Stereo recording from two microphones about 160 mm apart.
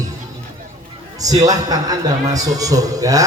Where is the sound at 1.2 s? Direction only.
20° right (ahead or behind).